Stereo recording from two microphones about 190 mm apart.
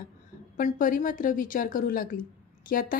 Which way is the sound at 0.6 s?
45° left (ahead or behind).